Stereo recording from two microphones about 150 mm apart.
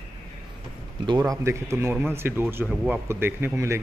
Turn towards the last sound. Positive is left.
turn(degrees=-15)  # may be behind; listen again after turning